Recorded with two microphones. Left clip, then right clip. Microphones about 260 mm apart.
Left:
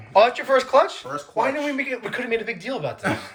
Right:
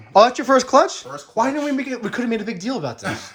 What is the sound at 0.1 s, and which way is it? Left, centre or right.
Speech, right.